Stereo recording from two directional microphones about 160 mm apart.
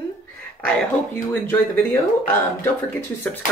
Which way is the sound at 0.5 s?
10° left (ahead or behind).